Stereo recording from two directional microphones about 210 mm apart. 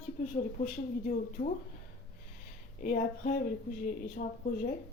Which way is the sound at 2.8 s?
40° left (ahead or behind).